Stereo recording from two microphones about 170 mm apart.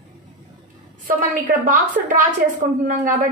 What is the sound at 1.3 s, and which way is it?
A woman's voice, 50° right (ahead or behind).